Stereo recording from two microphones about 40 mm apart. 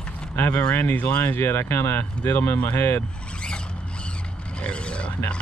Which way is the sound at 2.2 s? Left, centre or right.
Left.